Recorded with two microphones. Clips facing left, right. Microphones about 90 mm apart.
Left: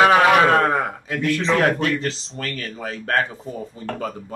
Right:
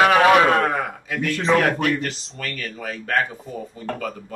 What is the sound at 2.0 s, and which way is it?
A man's voice, 30° left (ahead or behind).